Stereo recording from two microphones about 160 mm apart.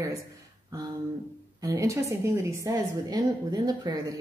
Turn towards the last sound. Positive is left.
turn(degrees=-25)  # may be behind; listen again after turning